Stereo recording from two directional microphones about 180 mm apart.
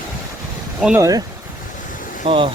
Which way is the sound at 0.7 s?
5° right (ahead or behind).